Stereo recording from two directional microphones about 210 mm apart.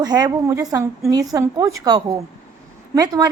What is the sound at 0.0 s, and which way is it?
A woman's voice, 20° right (ahead or behind).